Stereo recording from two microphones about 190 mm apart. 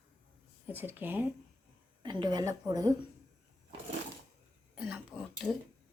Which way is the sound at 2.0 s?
20° right (ahead or behind).